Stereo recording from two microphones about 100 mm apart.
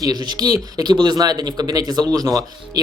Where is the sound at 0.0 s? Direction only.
45° right (ahead or behind).